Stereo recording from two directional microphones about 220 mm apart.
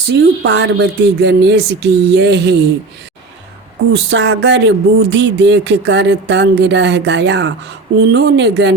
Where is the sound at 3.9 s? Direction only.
55° right (ahead or behind).